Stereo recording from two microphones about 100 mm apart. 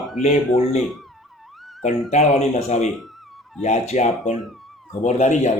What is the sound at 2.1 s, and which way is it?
Speech, 90° left.